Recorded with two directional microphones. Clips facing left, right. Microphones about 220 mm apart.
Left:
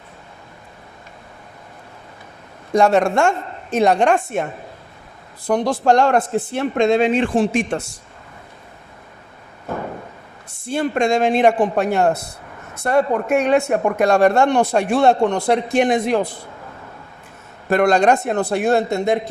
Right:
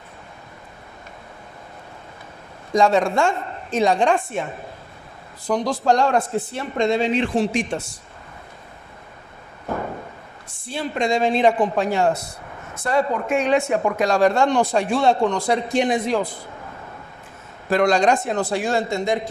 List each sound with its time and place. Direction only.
2.7 s speech: 65° left (ahead or behind)
5.5 s speech: 70° left (ahead or behind); by 7.8 s 50° left (ahead or behind)
10.7 s speech: 50° left (ahead or behind); by 16.2 s 65° left (ahead or behind)
17.7 s speech: 60° left (ahead or behind)